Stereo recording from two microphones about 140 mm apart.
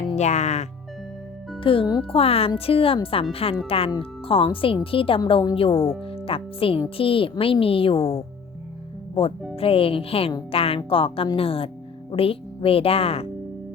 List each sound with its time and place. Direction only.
0.2 s speech: 55° left (ahead or behind)
1.6 s a woman's voice: 40° left (ahead or behind)